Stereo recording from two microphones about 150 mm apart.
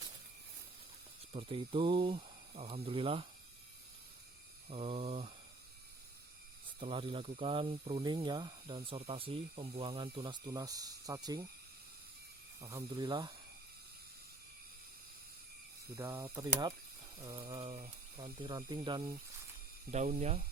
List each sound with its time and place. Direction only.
1.3 s speech: 40° right (ahead or behind)
4.7 s speech: 40° right (ahead or behind)
6.7 s speech: 35° right (ahead or behind)
12.5 s speech: 20° right (ahead or behind)
16.0 s speech: 15° right (ahead or behind); by 19.0 s 30° right (ahead or behind)
19.9 s speech: 50° right (ahead or behind)